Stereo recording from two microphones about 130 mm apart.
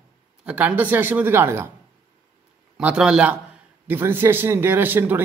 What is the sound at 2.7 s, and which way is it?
A man's voice, 5° right (ahead or behind).